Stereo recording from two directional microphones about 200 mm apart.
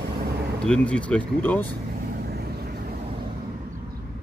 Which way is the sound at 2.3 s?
50° right (ahead or behind).